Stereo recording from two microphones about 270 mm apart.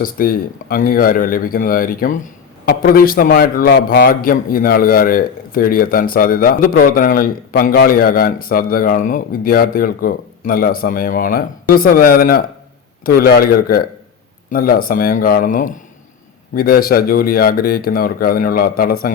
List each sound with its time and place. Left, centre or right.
0.0 s a man's voice: left